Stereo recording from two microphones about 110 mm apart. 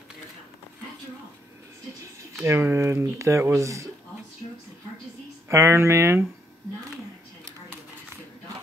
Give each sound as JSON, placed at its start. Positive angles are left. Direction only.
{"t": 2.4, "sound": "speech", "side_deg": -25}
{"t": 5.5, "sound": "speech", "side_deg": -25}